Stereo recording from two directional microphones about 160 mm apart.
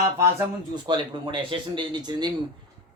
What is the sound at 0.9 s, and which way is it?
A man's voice, 30° right (ahead or behind).